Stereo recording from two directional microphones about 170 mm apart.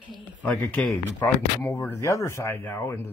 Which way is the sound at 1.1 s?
15° left (ahead or behind).